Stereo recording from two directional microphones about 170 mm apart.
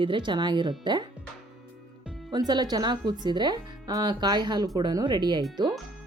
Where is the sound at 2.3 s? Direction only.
25° right (ahead or behind).